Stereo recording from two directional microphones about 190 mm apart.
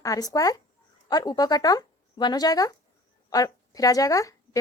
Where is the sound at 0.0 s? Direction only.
20° left (ahead or behind).